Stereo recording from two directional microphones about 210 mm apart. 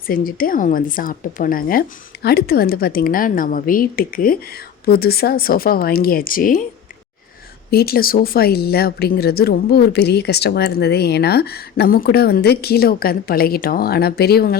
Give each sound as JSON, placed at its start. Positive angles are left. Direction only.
{"t": 0.1, "sound": "a woman's voice", "side_deg": 45}
{"t": 7.7, "sound": "speech", "side_deg": 45}